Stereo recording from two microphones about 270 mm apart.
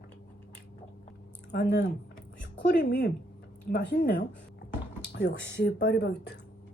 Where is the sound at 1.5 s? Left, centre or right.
Left.